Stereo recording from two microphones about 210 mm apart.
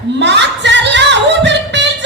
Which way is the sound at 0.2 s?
55° right (ahead or behind).